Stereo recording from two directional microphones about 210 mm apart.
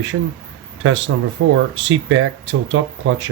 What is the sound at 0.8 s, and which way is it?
Speech, 65° right (ahead or behind).